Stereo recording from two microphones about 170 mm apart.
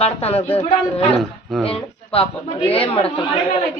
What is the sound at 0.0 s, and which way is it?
Speech, 35° left (ahead or behind).